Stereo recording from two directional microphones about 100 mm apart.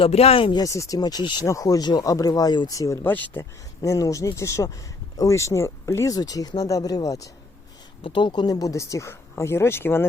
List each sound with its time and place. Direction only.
0.0 s speech: 90° left
0.5 s speech: 35° left (ahead or behind)
1.5 s speech: 35° left (ahead or behind)
3.8 s speech: 35° left (ahead or behind)
8.0 s speech: 55° left (ahead or behind); by 10.1 s 25° left (ahead or behind)